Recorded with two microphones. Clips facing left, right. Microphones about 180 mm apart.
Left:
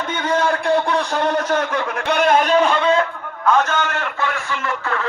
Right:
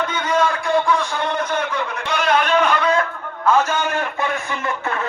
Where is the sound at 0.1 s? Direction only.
55° left (ahead or behind).